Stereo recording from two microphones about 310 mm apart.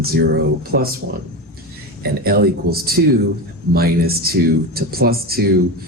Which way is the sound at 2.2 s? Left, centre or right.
Right.